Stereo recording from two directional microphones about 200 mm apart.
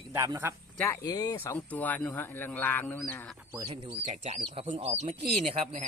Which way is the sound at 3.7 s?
30° right (ahead or behind).